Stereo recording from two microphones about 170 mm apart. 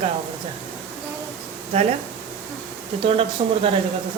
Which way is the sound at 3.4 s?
30° right (ahead or behind).